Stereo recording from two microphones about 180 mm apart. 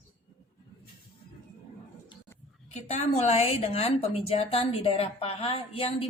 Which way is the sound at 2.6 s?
40° left (ahead or behind).